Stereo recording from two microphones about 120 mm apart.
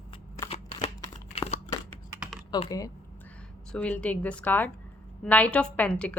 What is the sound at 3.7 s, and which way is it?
A woman's voice, 10° left (ahead or behind).